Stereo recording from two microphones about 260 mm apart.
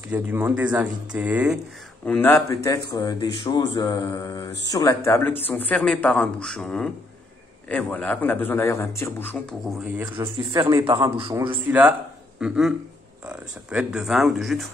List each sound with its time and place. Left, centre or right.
0.1 s speech: centre
2.0 s speech: centre
10.1 s a man's voice: centre
11.6 s speech: centre